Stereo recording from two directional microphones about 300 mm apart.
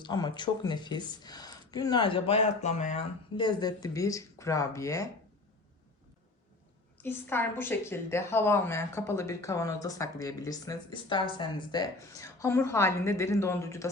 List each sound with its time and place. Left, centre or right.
0.0 s a woman's voice: centre
7.0 s a woman's voice: centre